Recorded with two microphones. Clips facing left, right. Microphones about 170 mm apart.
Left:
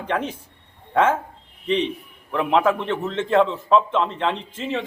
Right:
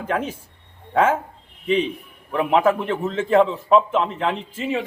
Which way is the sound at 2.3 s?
5° right (ahead or behind).